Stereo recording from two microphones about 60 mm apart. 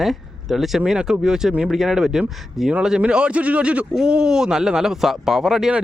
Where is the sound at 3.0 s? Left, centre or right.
Centre.